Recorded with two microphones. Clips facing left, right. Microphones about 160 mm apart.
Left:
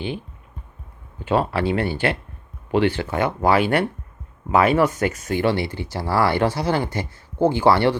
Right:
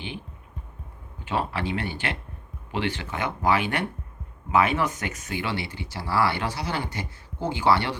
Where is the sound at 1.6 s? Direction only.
45° left (ahead or behind).